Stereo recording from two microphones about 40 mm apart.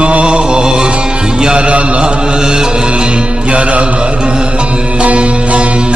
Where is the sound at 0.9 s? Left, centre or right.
Right.